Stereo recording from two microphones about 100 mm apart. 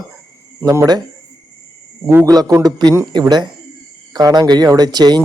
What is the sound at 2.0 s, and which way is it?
A man's voice, 35° right (ahead or behind).